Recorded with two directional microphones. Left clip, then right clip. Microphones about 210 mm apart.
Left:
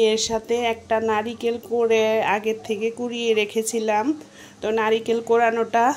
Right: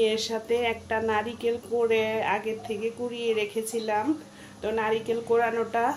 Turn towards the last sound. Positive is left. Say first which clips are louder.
# left 7 dB
turn(degrees=40)  # may be behind; listen again after turning